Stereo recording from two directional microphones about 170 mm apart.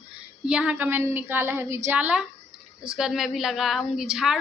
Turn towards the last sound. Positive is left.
turn(degrees=0)  # may be behind; listen again after turning